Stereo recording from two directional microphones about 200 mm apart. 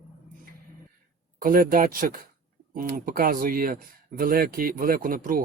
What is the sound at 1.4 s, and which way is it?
Speech, 45° right (ahead or behind).